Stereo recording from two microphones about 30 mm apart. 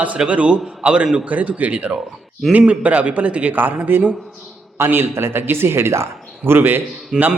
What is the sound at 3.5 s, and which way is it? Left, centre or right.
Speech, right.